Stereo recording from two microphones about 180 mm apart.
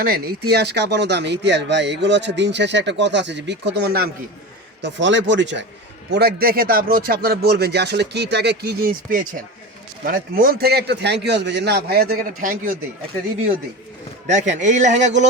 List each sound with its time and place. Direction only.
0.0 s speech: 60° right (ahead or behind)
4.8 s speech: 90° right
6.1 s speech: 60° right (ahead or behind)
14.3 s speech: 40° right (ahead or behind)